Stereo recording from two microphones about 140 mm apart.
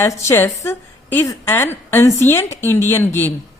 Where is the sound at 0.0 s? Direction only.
15° left (ahead or behind).